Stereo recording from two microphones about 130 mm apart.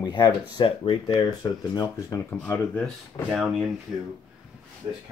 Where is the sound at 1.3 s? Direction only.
25° left (ahead or behind).